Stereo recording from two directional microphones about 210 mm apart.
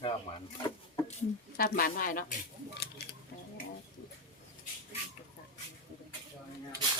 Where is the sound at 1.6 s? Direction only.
45° left (ahead or behind).